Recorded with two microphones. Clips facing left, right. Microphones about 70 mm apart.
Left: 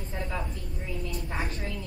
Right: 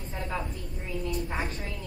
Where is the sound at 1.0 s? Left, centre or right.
Right.